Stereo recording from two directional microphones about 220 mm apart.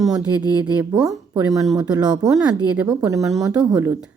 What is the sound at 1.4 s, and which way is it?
A woman's voice, 15° right (ahead or behind).